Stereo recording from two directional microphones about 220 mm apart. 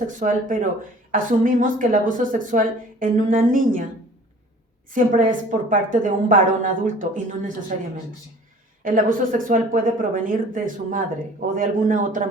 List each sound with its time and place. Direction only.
0.2 s speech: 35° right (ahead or behind)
4.9 s speech: 35° right (ahead or behind)
8.8 s speech: 40° right (ahead or behind)